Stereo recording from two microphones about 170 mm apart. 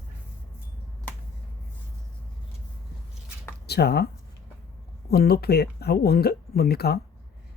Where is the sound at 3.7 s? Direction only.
70° left (ahead or behind).